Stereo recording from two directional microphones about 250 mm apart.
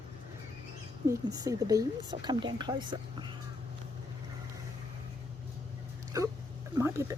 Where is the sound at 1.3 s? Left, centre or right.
Centre.